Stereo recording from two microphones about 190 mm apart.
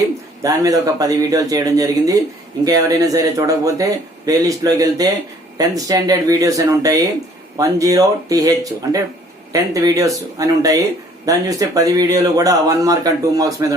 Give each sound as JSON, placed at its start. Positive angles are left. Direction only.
{"t": 0.4, "sound": "speech", "side_deg": -20}